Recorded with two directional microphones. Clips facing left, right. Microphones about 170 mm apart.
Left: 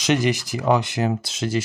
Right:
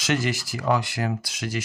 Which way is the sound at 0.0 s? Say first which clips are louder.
Left 5 dB; 20° left (ahead or behind).